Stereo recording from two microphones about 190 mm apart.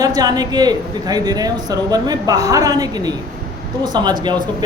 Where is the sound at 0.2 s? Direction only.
20° right (ahead or behind).